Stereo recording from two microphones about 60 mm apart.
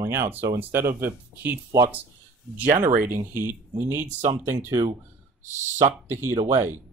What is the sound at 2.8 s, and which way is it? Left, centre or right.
Speech, right.